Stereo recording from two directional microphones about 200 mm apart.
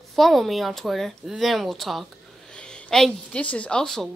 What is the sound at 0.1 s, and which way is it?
A woman's voice, centre (ahead or behind).